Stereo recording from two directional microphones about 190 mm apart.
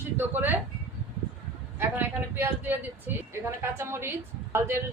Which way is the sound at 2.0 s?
10° right (ahead or behind).